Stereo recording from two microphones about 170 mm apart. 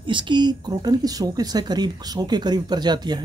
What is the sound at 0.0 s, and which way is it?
Speech, 30° right (ahead or behind).